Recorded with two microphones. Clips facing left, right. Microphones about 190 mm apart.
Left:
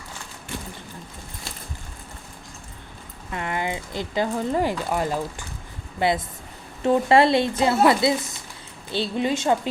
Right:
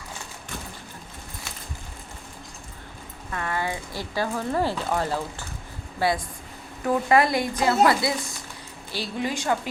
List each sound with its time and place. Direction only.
3.3 s speech: 20° left (ahead or behind)